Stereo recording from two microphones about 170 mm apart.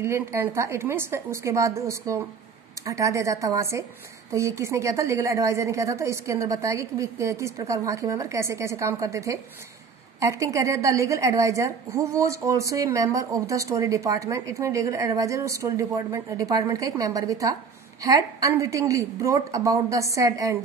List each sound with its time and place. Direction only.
0.0 s a woman's voice: 15° right (ahead or behind)